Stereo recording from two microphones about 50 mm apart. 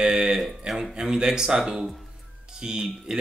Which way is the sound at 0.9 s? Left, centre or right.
Centre.